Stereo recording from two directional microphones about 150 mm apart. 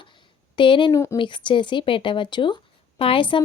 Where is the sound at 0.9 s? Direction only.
20° left (ahead or behind).